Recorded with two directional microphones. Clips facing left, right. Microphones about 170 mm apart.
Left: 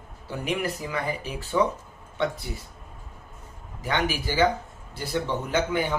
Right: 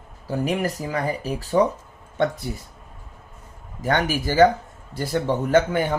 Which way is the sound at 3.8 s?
45° right (ahead or behind).